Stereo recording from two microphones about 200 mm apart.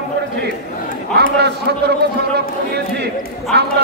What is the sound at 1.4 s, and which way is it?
A man's voice, 55° right (ahead or behind).